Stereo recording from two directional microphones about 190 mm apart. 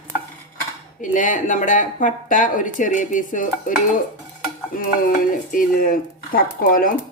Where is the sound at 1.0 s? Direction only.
45° left (ahead or behind).